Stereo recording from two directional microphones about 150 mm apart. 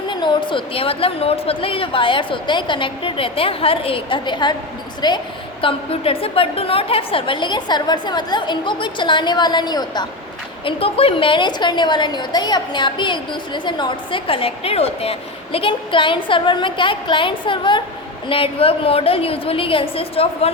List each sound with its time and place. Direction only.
0.1 s a woman's voice: 30° left (ahead or behind)
10.7 s a woman's voice: 40° left (ahead or behind)